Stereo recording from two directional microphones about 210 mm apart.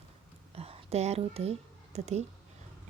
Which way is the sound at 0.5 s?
30° right (ahead or behind).